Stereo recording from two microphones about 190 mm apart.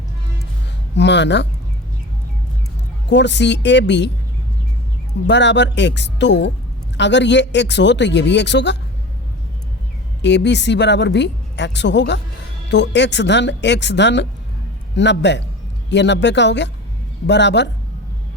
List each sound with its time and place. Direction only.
0.9 s a woman's voice: 65° left (ahead or behind)
3.1 s a woman's voice: 65° left (ahead or behind)
5.2 s a woman's voice: 65° left (ahead or behind)
10.2 s a woman's voice: 65° left (ahead or behind)